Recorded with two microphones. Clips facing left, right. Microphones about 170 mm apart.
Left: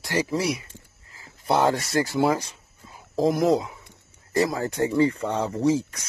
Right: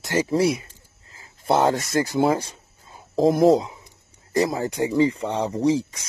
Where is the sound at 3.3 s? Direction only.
30° right (ahead or behind).